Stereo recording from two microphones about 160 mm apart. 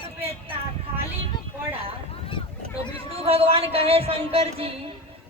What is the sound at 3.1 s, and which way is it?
Speech, 35° right (ahead or behind).